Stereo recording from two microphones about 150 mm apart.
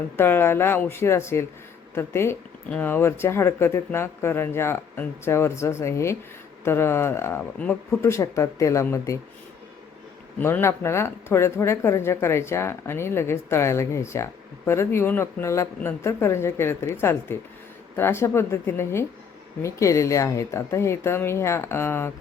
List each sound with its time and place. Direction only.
0.2 s speech: 15° left (ahead or behind)
10.3 s speech: 15° left (ahead or behind)